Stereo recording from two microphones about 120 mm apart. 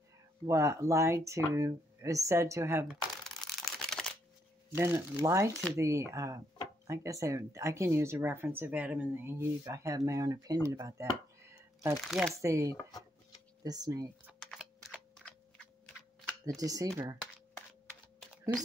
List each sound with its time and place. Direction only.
0.5 s speech: 25° right (ahead or behind)
2.9 s crumpling: 5° left (ahead or behind)
4.7 s speech: 20° right (ahead or behind)
12.0 s speech: centre (ahead or behind)
12.4 s speech: 25° right (ahead or behind)
14.2 s computer keyboard: 5° right (ahead or behind)
16.4 s speech: 30° right (ahead or behind)